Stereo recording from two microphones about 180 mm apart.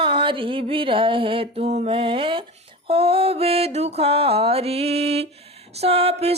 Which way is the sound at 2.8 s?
30° right (ahead or behind).